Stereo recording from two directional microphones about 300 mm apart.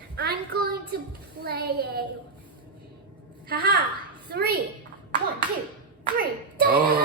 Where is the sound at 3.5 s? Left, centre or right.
Right.